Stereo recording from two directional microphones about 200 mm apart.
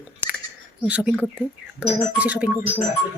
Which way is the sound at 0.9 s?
5° right (ahead or behind).